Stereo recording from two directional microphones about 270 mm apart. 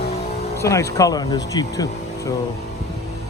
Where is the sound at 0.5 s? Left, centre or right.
Centre.